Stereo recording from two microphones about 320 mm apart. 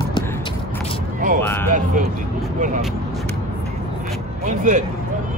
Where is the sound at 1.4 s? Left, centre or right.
Centre.